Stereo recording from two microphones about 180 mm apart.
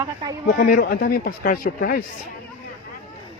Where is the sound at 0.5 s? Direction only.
50° left (ahead or behind).